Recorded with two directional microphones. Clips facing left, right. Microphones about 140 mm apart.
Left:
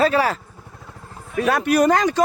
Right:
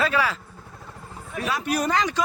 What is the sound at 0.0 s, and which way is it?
Speech, 40° left (ahead or behind).